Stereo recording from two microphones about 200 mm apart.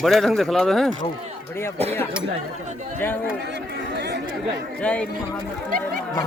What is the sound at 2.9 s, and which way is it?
Speech, 10° left (ahead or behind).